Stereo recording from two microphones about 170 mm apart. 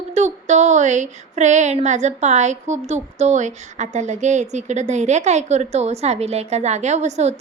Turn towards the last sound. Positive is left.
turn(degrees=-40)  # may be behind; listen again after turning